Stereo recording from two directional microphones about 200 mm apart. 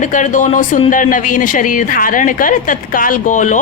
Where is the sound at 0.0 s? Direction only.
40° left (ahead or behind).